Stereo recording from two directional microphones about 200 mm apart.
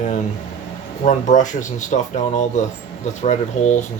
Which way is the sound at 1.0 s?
40° left (ahead or behind).